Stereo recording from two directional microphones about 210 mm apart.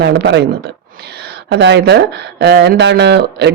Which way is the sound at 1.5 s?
55° right (ahead or behind).